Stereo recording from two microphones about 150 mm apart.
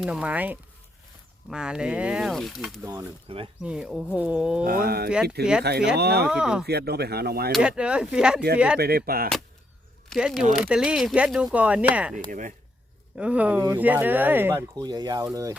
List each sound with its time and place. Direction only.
0.0 s speech: 5° right (ahead or behind)
2.8 s speech: 20° right (ahead or behind)
3.2 s speech: 40° right (ahead or behind)
3.6 s speech: 5° right (ahead or behind)
4.6 s speech: 75° right (ahead or behind); by 6.2 s 90° right
6.2 s speech: 5° right (ahead or behind)
6.7 s speech: 90° right
7.5 s speech: 5° right (ahead or behind)
8.8 s speech: 90° right
10.1 s speech: centre (ahead or behind)
12.3 s speech: 60° right (ahead or behind)
13.1 s speech: 10° right (ahead or behind)
14.8 s speech: 25° right (ahead or behind)